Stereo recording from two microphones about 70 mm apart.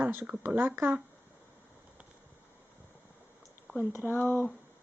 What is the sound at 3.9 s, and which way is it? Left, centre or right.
Speech, left.